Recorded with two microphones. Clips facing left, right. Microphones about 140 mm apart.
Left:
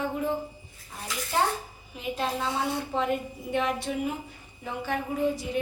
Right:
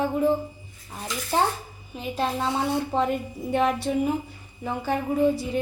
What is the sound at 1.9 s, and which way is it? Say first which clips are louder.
Speech: right 2 dB; 30° right (ahead or behind).